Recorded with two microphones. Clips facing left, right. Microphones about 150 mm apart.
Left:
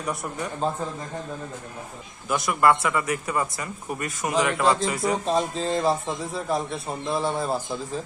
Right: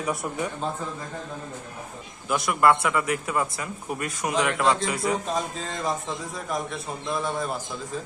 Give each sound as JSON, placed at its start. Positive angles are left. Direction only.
{"t": 0.0, "sound": "speech", "side_deg": 0}
{"t": 2.3, "sound": "speech", "side_deg": 0}
{"t": 5.2, "sound": "a man's voice", "side_deg": 30}